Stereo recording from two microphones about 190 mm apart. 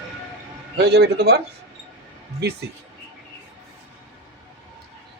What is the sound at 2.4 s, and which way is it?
Speech, 60° right (ahead or behind).